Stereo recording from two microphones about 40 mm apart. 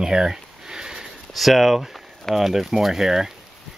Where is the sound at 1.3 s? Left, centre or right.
Centre.